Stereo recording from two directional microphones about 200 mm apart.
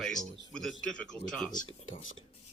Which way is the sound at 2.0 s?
80° left.